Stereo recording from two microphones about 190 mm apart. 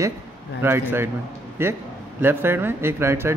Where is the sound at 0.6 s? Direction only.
10° right (ahead or behind).